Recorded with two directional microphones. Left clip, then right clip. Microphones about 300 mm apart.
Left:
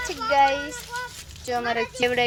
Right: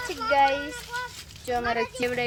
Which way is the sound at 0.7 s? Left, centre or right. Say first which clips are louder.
Left 1 dB; centre.